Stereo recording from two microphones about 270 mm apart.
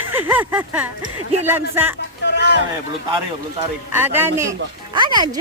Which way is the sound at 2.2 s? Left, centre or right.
Left.